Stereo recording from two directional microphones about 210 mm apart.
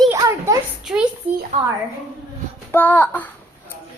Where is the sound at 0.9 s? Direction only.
5° right (ahead or behind).